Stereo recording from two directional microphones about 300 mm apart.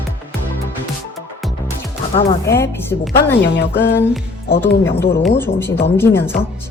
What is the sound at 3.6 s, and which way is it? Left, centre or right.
Speech, left.